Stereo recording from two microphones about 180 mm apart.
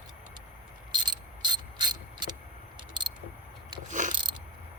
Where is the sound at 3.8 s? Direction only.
45° right (ahead or behind).